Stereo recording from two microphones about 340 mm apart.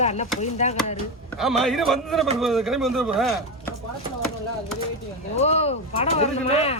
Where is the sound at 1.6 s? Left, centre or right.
Centre.